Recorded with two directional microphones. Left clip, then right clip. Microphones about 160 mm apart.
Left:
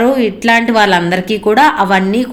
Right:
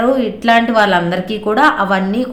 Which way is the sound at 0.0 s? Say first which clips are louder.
Left 2 dB; 15° left (ahead or behind).